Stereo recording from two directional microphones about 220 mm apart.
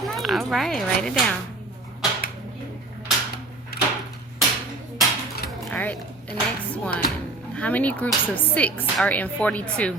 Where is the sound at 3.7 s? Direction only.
45° left (ahead or behind).